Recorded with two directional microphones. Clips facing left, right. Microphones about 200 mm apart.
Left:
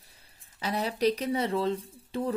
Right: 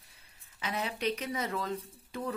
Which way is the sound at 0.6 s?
35° left (ahead or behind).